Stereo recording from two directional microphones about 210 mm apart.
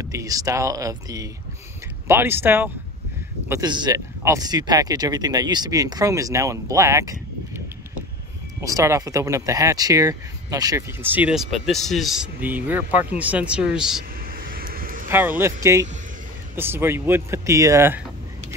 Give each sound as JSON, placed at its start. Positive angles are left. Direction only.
{"t": 0.0, "sound": "speech", "side_deg": -15}
{"t": 14.3, "sound": "vehicle", "side_deg": -45}
{"t": 15.0, "sound": "speech", "side_deg": -10}